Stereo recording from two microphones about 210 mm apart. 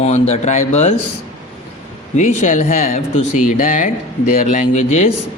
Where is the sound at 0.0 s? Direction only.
35° left (ahead or behind).